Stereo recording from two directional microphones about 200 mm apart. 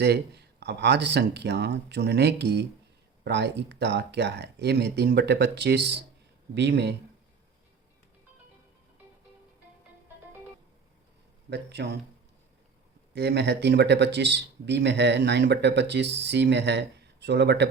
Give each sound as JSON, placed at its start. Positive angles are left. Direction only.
{"t": 0.0, "sound": "speech", "side_deg": -55}
{"t": 11.4, "sound": "speech", "side_deg": -55}
{"t": 13.1, "sound": "speech", "side_deg": -55}